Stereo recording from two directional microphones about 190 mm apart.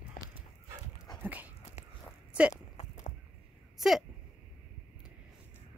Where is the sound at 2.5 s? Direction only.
40° left (ahead or behind).